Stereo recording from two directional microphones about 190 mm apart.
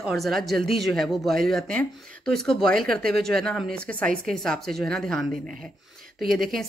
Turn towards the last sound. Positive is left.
turn(degrees=0)  # may be behind; listen again after turning